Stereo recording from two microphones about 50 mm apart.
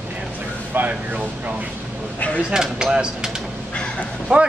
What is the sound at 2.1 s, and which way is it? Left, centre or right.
Speech, left.